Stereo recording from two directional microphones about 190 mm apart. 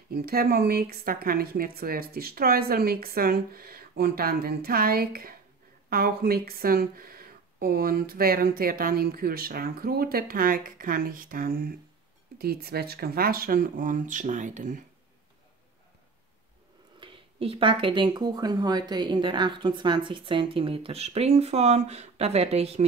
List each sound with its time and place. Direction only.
0.1 s speech: 50° right (ahead or behind)
17.0 s speech: 30° right (ahead or behind)